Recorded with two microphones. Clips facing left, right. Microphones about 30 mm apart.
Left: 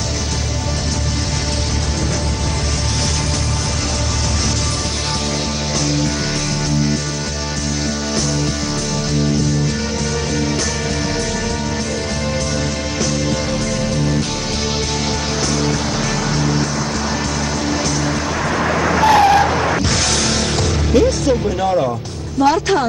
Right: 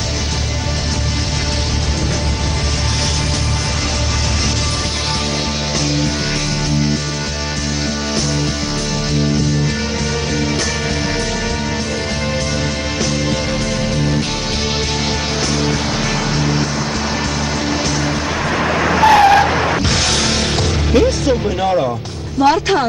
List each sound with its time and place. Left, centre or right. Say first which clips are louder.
18.0 s vehicle: right 1 dB; centre
20.9 s music: even; centre
22.4 s speech: right 1 dB; right